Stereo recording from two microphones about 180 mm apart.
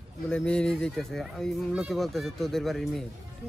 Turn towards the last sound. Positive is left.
turn(degrees=0)  # may be behind; listen again after turning